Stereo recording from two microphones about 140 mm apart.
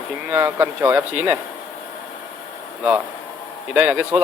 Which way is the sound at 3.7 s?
10° right (ahead or behind).